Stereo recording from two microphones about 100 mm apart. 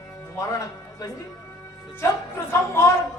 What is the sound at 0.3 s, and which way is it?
Speech, 30° left (ahead or behind).